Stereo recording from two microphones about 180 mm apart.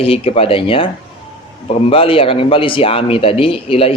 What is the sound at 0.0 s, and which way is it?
Speech, 30° left (ahead or behind).